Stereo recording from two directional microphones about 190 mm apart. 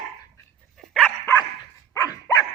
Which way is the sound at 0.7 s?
5° left (ahead or behind).